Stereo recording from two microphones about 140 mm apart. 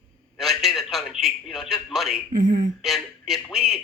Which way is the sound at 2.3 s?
65° right (ahead or behind).